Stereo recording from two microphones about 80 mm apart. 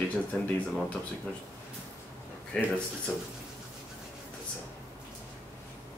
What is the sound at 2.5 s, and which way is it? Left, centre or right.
Speech, centre.